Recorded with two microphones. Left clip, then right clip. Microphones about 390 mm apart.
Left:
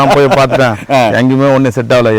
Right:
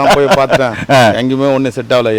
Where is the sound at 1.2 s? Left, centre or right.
Left.